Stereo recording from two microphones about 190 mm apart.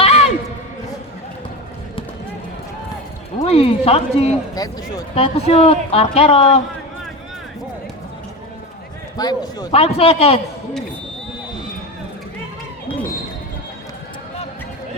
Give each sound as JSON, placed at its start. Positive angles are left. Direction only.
{"t": 0.0, "sound": "a sound", "side_deg": 35}
{"t": 3.3, "sound": "speech", "side_deg": 35}
{"t": 4.5, "sound": "a man's voice", "side_deg": 20}
{"t": 5.1, "sound": "speech", "side_deg": 35}
{"t": 9.1, "sound": "a man's voice", "side_deg": 20}
{"t": 9.7, "sound": "speech", "side_deg": 30}